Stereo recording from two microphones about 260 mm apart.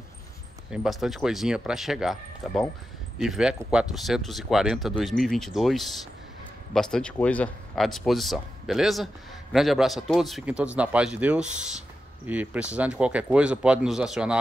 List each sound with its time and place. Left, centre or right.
0.7 s speech: centre